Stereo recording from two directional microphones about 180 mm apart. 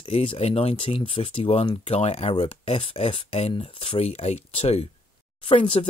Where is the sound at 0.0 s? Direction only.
30° left (ahead or behind).